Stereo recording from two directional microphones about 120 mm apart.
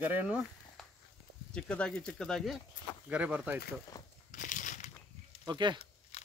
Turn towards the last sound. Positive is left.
turn(degrees=-40)  # may be behind; listen again after turning